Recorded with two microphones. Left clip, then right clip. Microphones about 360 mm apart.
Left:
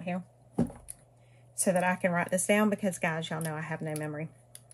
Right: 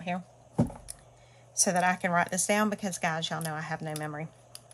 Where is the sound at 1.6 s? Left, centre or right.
Centre.